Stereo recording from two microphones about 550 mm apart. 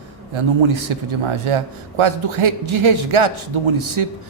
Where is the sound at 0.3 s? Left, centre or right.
Right.